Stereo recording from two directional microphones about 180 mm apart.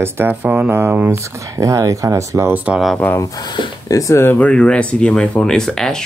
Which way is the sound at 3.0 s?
15° left (ahead or behind).